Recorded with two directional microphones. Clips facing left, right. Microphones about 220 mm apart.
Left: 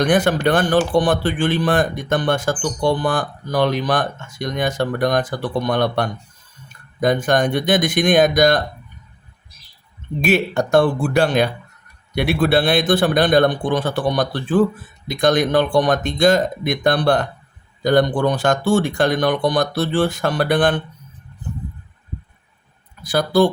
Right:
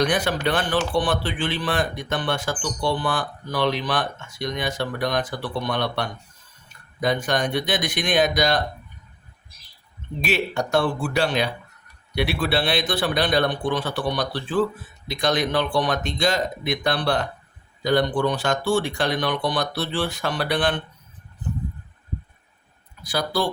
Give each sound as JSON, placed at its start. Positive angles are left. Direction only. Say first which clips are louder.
{"t": 0.0, "sound": "speech", "louder": "left 6 dB", "side_deg": 50}
{"t": 10.2, "sound": "speech", "louder": "left 7 dB", "side_deg": 50}
{"t": 23.0, "sound": "speech", "louder": "left 9 dB", "side_deg": 50}